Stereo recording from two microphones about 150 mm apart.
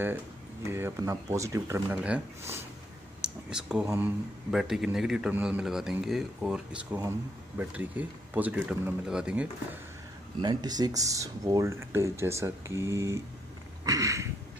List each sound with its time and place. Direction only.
0.7 s speech: 15° right (ahead or behind)
2.0 s speech: 10° right (ahead or behind)
3.2 s a sound: 5° right (ahead or behind)
3.8 s speech: 15° right (ahead or behind)
4.5 s a man's voice: 5° right (ahead or behind)
10.4 s speech: 30° right (ahead or behind)